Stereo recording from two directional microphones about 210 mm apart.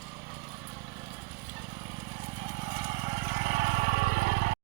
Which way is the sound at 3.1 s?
30° right (ahead or behind).